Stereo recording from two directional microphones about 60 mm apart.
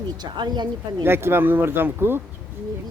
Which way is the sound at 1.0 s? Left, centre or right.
Right.